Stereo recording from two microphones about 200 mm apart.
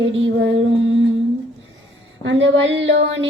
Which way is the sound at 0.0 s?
70° right (ahead or behind).